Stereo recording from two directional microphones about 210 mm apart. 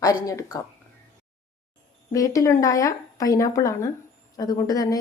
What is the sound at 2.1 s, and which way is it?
Speech, 15° left (ahead or behind).